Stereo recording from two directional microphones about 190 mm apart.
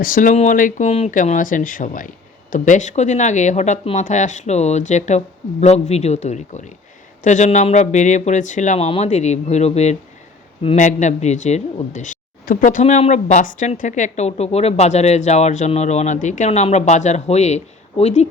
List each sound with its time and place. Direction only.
0.0 s speech: 45° left (ahead or behind)